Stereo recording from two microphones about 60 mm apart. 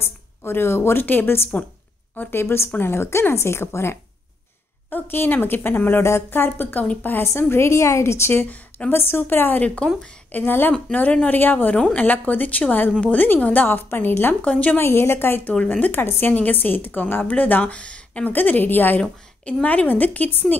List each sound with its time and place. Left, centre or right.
0.0 s a sound: left
1.0 s a woman's voice: left
7.2 s a woman's voice: left
8.5 s speech: left
8.9 s a woman's voice: left
10.7 s a woman's voice: left
14.4 s a woman's voice: left
14.8 s a woman's voice: left; by 18.3 s centre
18.3 s a woman's voice: left